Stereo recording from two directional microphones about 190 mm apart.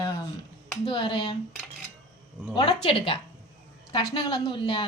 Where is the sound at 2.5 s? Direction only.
25° left (ahead or behind).